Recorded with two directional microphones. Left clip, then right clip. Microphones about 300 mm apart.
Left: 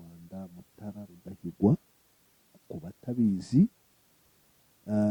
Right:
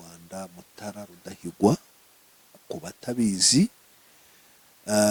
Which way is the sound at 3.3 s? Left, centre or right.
Centre.